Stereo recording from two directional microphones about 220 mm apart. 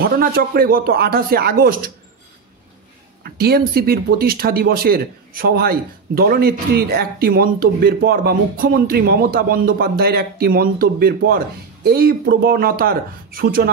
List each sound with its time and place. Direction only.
0.0 s speech: 40° right (ahead or behind)
3.3 s speech: 45° right (ahead or behind)